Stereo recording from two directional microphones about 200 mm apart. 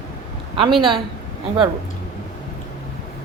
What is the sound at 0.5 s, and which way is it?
Speech, 25° right (ahead or behind).